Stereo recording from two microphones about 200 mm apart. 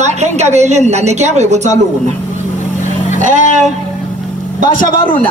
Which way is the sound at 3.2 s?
35° right (ahead or behind).